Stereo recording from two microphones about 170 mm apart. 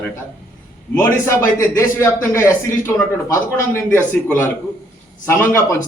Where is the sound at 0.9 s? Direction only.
10° left (ahead or behind).